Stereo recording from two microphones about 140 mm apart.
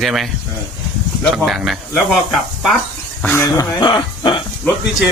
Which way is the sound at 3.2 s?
15° left (ahead or behind).